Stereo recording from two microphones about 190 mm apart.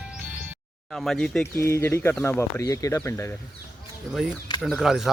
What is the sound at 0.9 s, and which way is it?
Speech, centre (ahead or behind).